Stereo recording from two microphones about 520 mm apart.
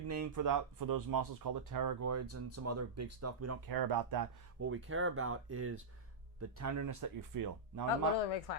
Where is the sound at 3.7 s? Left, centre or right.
Right.